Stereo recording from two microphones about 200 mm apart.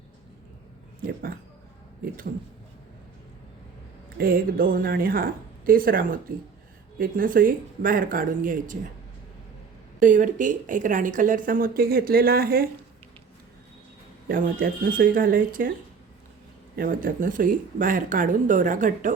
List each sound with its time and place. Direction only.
4.2 s a woman's voice: 45° right (ahead or behind)
10.0 s a woman's voice: 40° right (ahead or behind)
14.3 s a woman's voice: 45° right (ahead or behind)
16.7 s speech: 45° right (ahead or behind)